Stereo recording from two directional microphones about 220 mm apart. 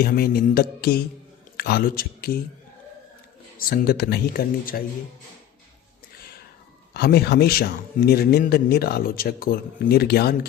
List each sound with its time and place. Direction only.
0.0 s a man's voice: 45° left (ahead or behind)
3.7 s a man's voice: 45° left (ahead or behind)
6.9 s a man's voice: 45° left (ahead or behind)